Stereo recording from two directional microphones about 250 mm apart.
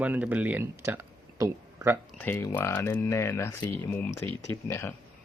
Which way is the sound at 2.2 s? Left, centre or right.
Centre.